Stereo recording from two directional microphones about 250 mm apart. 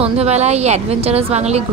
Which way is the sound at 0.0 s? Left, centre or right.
Right.